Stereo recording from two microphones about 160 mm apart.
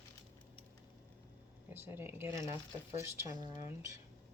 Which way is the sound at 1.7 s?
15° right (ahead or behind).